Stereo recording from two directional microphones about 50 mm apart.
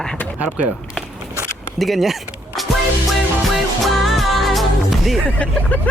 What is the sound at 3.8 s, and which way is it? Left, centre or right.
Music, centre.